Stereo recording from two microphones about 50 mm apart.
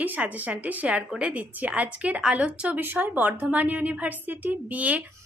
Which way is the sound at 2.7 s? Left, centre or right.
Right.